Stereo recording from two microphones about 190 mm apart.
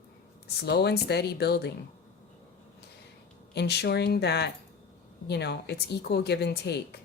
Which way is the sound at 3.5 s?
60° left (ahead or behind).